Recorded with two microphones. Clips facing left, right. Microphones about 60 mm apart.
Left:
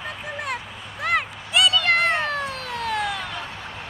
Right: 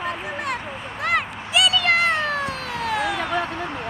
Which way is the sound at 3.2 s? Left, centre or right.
Right.